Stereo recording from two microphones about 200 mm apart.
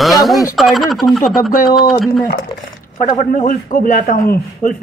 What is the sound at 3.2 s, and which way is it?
Speech, 40° left (ahead or behind).